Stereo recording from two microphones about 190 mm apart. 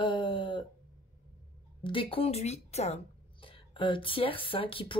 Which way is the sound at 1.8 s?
30° left (ahead or behind).